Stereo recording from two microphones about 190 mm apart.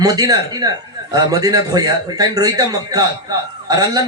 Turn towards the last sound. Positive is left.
turn(degrees=-20)  # may be behind; listen again after turning